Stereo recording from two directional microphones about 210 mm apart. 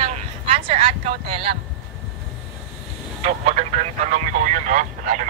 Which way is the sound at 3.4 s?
35° right (ahead or behind).